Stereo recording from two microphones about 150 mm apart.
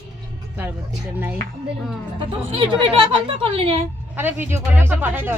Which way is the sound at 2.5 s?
35° right (ahead or behind).